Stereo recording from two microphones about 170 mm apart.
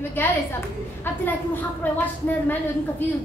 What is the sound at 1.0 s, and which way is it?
A woman's voice, 10° left (ahead or behind).